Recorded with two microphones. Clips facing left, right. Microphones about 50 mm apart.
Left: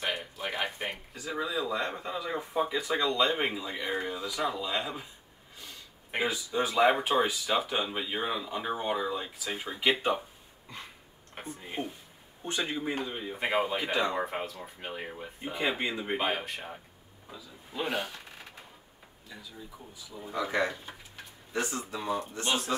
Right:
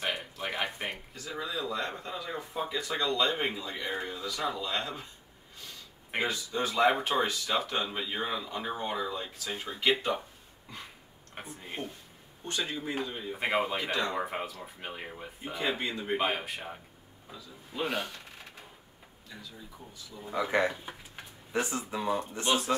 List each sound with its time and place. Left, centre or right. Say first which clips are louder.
0.0 s a sound: even; centre
1.1 s speech: left 3 dB; centre
6.1 s speech: left 2 dB; centre
11.3 s speech: left 2 dB; centre
12.4 s speech: left 2 dB; centre
13.4 s speech: left 1 dB; centre
14.2 s speech: left 1 dB; centre
15.8 s speech: left 1 dB; centre
16.2 s speech: even; centre
19.3 s speech: left 1 dB; centre
20.2 s speech: right 1 dB; centre
20.5 s speech: right 3 dB; right